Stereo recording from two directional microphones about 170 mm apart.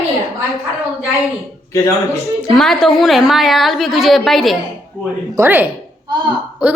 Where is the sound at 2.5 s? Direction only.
Centre (ahead or behind).